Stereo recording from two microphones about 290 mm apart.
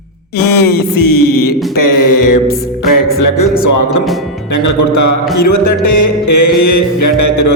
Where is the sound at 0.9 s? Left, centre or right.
Left.